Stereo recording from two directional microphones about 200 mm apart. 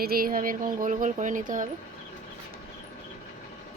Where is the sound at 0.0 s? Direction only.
50° right (ahead or behind).